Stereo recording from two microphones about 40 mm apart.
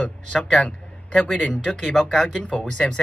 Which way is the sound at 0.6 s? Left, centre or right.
Left.